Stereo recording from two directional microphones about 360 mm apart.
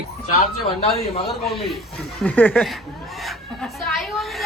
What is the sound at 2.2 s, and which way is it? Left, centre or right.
A man's voice, centre.